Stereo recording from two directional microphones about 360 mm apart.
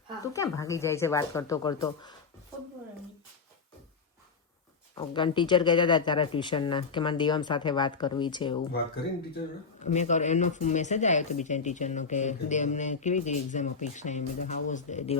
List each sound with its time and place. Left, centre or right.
0.3 s speech: centre
4.9 s speech: centre
9.8 s speech: centre